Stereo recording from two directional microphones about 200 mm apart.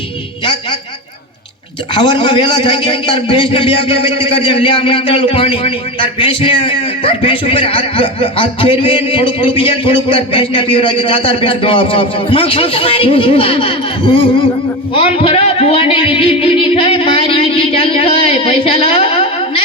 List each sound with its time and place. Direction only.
1.9 s a man's voice: 25° left (ahead or behind)